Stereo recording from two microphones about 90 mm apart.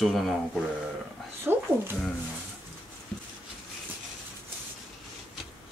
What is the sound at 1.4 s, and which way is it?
Speech, 25° right (ahead or behind).